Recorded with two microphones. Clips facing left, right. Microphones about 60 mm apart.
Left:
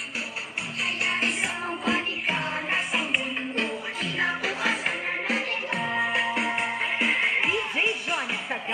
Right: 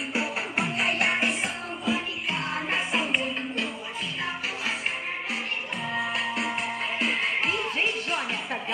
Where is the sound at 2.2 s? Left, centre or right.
Centre.